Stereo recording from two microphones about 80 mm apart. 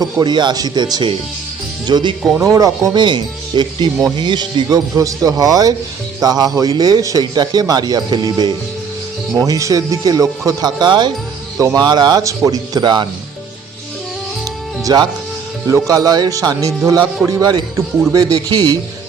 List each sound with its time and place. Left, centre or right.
0.0 s speech: right
2.5 s speech: right
2.9 s speech: right
9.3 s speech: right
10.8 s speech: right
12.2 s speech: right
14.9 s speech: right
15.6 s speech: right